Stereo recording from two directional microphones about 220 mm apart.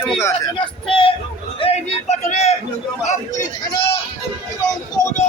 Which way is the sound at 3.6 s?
20° left (ahead or behind).